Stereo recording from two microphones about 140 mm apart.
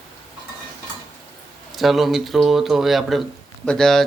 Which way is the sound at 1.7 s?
Centre (ahead or behind).